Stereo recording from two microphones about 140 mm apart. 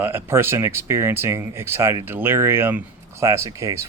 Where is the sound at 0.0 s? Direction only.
15° right (ahead or behind).